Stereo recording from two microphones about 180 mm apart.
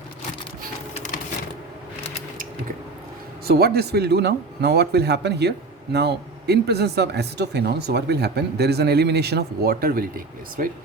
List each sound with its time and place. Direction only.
3.4 s a man's voice: 60° right (ahead or behind)